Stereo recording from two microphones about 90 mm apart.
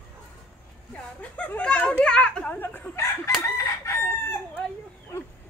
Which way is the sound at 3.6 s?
30° left (ahead or behind).